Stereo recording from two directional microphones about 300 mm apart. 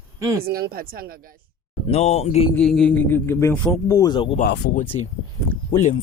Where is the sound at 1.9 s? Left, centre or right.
Left.